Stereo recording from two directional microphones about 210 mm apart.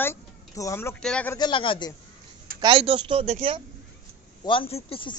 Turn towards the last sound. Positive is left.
turn(degrees=25)  # may be behind; listen again after turning